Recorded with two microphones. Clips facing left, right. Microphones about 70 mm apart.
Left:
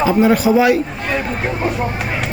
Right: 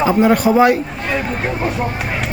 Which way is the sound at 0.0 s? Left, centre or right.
Right.